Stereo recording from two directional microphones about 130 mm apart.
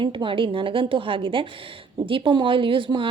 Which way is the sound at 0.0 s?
40° right (ahead or behind).